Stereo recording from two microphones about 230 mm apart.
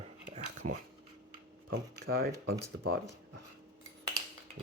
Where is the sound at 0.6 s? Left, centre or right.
Right.